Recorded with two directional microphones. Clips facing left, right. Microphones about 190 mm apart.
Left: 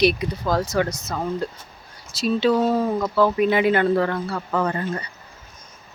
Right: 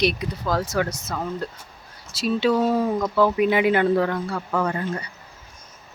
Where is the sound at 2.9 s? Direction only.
5° left (ahead or behind).